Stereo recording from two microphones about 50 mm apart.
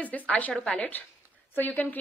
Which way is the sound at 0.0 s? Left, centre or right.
Left.